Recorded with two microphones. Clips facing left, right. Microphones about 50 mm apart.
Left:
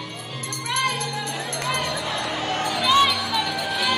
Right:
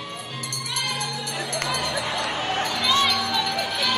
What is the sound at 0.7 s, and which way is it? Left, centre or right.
Music, left.